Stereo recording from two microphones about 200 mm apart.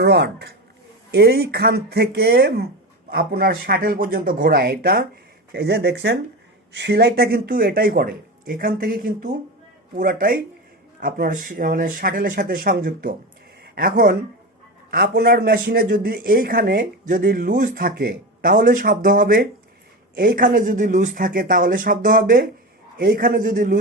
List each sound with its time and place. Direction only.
0.0 s speech: 55° right (ahead or behind)